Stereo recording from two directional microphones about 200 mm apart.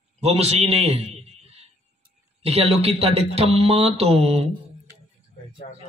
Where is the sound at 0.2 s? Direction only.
30° right (ahead or behind).